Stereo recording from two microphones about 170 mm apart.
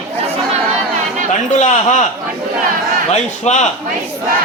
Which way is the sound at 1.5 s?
45° left (ahead or behind).